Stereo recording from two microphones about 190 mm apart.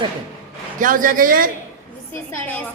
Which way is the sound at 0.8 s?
45° right (ahead or behind).